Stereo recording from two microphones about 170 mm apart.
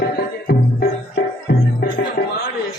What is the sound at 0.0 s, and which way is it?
Music, 65° left (ahead or behind).